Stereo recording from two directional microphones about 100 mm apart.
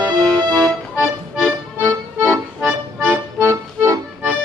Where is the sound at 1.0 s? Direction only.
5° right (ahead or behind).